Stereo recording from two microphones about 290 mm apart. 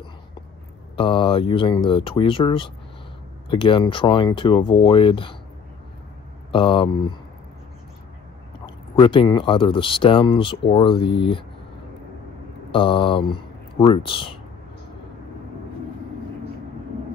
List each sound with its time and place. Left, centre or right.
0.9 s speech: centre
6.5 s speech: centre
8.9 s speech: centre
12.7 s speech: centre